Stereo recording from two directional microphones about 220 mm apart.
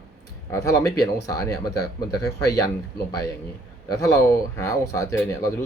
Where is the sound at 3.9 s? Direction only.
15° left (ahead or behind).